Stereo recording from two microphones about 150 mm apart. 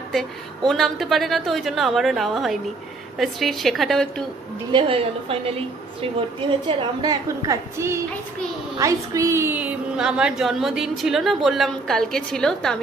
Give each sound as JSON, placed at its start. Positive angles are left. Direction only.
{"t": 0.7, "sound": "a woman's voice", "side_deg": 0}
{"t": 4.7, "sound": "a woman's voice", "side_deg": -35}